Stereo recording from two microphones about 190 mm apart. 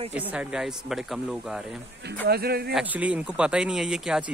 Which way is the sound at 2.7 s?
10° right (ahead or behind).